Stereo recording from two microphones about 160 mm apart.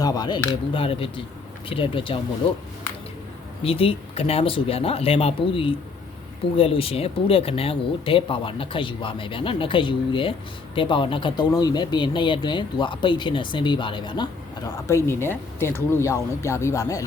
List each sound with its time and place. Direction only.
0.0 s speech: 25° left (ahead or behind)
3.6 s speech: 35° left (ahead or behind)
14.8 s speech: 15° left (ahead or behind)